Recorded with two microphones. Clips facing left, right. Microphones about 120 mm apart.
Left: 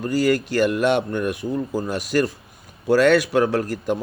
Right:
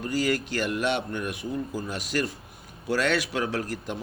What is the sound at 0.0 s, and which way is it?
Speech, 45° left (ahead or behind).